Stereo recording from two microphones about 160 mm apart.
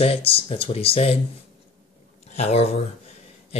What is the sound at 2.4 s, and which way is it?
Speech, 40° left (ahead or behind).